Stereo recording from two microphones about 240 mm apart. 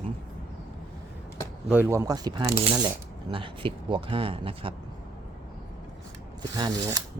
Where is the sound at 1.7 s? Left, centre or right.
Centre.